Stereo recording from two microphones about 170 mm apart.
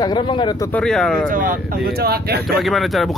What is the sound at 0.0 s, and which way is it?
Speech, 25° left (ahead or behind).